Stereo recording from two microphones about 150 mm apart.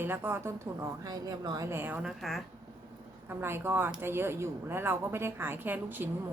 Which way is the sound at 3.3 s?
15° right (ahead or behind).